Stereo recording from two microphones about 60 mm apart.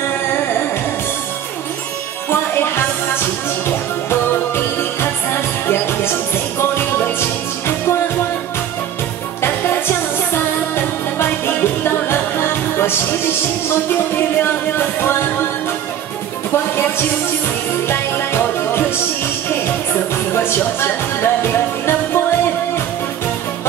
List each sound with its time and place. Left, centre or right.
2.2 s music: left
9.4 s music: left
17.8 s music: left
20.4 s music: left